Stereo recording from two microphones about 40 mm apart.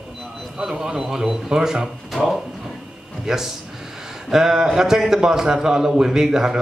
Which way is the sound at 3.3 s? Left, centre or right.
Centre.